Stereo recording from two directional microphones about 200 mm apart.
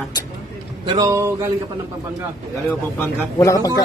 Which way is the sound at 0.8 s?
15° right (ahead or behind).